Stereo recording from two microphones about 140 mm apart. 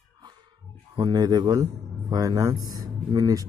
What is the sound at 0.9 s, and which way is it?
Speech, 30° right (ahead or behind).